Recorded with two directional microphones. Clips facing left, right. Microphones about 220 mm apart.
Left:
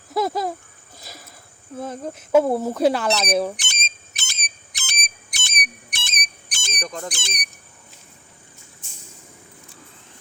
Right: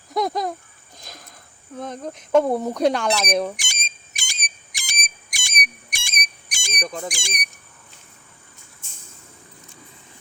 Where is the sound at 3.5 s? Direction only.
10° right (ahead or behind).